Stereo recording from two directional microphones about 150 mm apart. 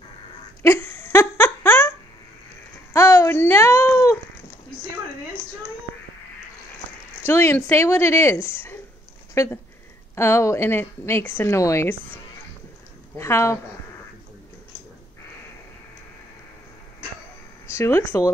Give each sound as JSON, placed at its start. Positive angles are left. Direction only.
{"t": 0.6, "sound": "a sound", "side_deg": 15}
{"t": 7.2, "sound": "a woman's voice", "side_deg": 15}
{"t": 13.2, "sound": "a woman's voice", "side_deg": 15}
{"t": 17.7, "sound": "a woman's voice", "side_deg": 15}